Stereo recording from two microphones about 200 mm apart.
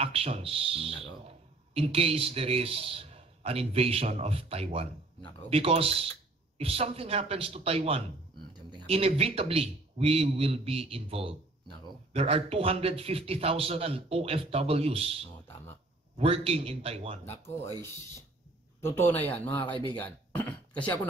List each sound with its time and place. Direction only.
0.0 s a man's voice: 30° right (ahead or behind)
17.2 s speech: 10° left (ahead or behind)
18.9 s speech: 10° left (ahead or behind)